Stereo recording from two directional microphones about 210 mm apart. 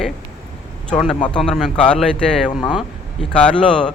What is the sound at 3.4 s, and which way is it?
Speech, 5° left (ahead or behind).